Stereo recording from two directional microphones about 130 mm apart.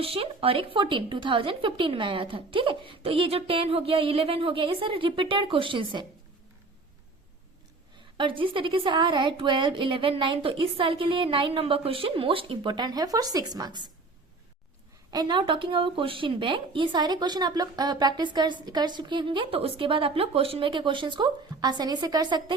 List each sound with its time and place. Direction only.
0.0 s a woman's voice: 45° right (ahead or behind)
8.2 s a woman's voice: 40° right (ahead or behind)
15.1 s a woman's voice: 35° right (ahead or behind)